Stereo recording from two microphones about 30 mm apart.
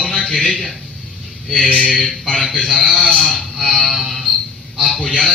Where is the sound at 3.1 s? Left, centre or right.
Left.